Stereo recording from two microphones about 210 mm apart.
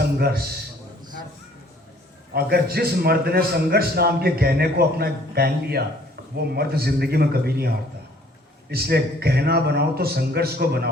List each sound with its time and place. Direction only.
0.2 s a man's voice: 50° right (ahead or behind)
2.3 s a man's voice: 50° right (ahead or behind)
8.7 s a man's voice: 50° right (ahead or behind)